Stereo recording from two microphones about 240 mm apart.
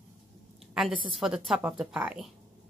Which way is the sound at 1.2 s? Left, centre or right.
Centre.